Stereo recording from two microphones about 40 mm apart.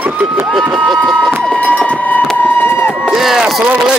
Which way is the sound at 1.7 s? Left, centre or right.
Left.